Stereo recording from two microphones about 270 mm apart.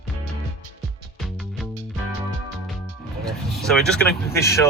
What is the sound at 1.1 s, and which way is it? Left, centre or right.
Music, centre.